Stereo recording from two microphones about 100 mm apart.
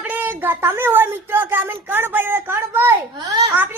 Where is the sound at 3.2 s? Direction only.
35° right (ahead or behind).